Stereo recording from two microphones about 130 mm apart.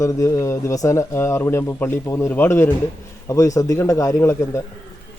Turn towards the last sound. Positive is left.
turn(degrees=25)  # may be behind; listen again after turning